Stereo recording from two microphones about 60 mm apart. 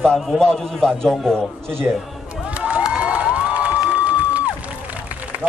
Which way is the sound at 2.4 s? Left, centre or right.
Centre.